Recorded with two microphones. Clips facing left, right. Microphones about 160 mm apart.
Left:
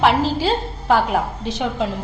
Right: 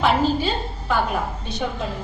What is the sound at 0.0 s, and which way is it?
A woman's voice, 90° left.